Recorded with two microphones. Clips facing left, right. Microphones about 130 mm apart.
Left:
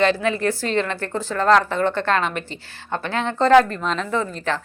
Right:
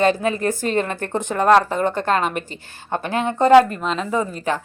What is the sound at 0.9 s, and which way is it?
A woman's voice, 20° right (ahead or behind).